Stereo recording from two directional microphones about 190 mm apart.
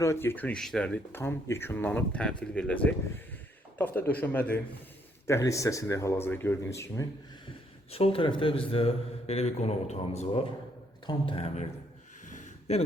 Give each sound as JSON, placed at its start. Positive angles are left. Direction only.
{"t": 0.0, "sound": "speech", "side_deg": 15}
{"t": 7.9, "sound": "a man's voice", "side_deg": 30}
{"t": 12.2, "sound": "a sound", "side_deg": 35}